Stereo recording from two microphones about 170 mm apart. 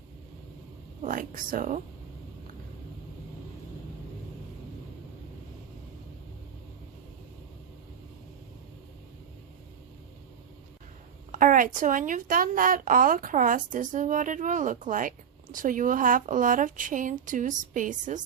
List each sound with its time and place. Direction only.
1.0 s a woman's voice: 55° right (ahead or behind)
11.3 s a woman's voice: 50° right (ahead or behind)